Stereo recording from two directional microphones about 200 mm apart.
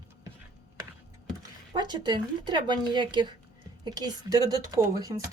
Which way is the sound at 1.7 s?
20° right (ahead or behind).